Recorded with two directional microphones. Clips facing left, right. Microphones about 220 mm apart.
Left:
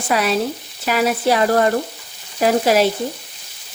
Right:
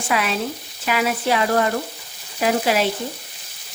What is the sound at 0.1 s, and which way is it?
Frying, 40° left (ahead or behind).